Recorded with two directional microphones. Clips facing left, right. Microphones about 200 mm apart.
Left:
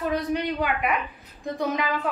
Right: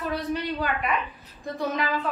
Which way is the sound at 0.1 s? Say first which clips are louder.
Left 3 dB; 15° left (ahead or behind).